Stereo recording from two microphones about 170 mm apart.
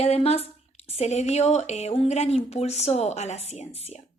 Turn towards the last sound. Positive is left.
turn(degrees=40)  # may be behind; listen again after turning